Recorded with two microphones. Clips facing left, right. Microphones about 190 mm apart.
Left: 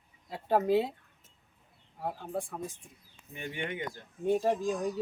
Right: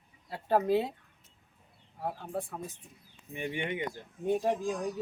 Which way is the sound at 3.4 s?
20° right (ahead or behind).